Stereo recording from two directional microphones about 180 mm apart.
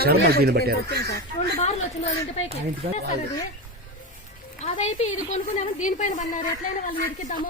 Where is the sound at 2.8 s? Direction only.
35° right (ahead or behind).